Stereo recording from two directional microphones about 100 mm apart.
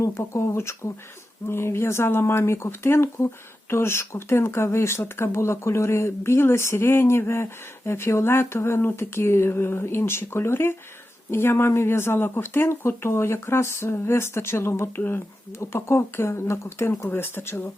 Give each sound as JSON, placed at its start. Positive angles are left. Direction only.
{"t": 0.0, "sound": "speech", "side_deg": 30}